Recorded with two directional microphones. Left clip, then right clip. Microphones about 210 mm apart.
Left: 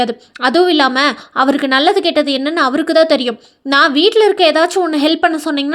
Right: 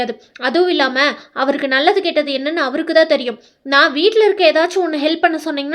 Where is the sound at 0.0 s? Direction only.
25° left (ahead or behind).